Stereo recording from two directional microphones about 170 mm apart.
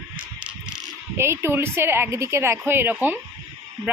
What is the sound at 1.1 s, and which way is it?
Speech, 15° right (ahead or behind).